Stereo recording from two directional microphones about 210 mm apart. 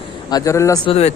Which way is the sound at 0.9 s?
30° left (ahead or behind).